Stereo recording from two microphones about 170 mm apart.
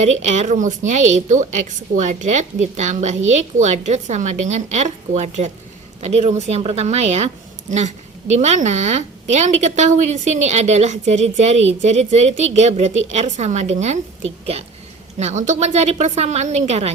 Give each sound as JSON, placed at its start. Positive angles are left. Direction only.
{"t": 0.0, "sound": "a woman's voice", "side_deg": -45}
{"t": 8.3, "sound": "a woman's voice", "side_deg": -40}